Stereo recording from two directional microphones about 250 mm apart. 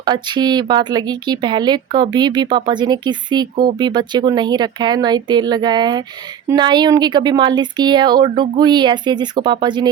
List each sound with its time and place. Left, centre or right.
0.0 s speech: centre